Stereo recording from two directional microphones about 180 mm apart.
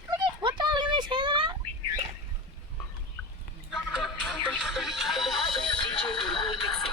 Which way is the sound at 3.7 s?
Centre (ahead or behind).